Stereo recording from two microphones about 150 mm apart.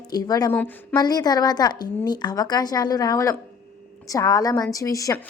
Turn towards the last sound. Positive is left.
turn(degrees=20)  # may be behind; listen again after turning